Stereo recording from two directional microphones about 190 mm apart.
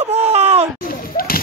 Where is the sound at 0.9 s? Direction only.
50° left (ahead or behind).